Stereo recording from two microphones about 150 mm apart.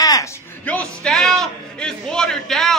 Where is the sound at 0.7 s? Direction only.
5° left (ahead or behind).